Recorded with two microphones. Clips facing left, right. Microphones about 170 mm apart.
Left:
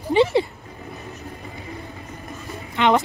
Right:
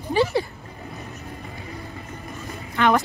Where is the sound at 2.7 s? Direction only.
20° left (ahead or behind).